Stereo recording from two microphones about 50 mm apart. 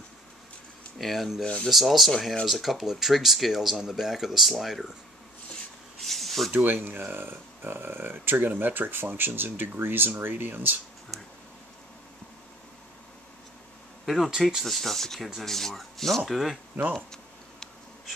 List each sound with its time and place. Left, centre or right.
0.9 s speech: centre
5.9 s a sound: centre
6.5 s speech: right
14.0 s speech: centre
15.1 s speech: centre
15.4 s speech: centre
16.9 s a sound: centre